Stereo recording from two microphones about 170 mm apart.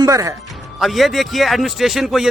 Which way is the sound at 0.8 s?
Centre (ahead or behind).